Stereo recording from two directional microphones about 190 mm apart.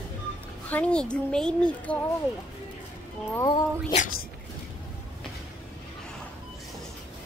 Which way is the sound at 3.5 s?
30° left (ahead or behind).